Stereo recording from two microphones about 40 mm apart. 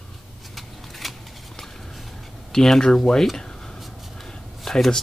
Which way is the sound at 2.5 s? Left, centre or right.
Centre.